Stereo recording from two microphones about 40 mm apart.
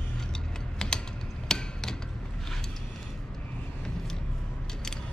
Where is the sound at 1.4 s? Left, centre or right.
Centre.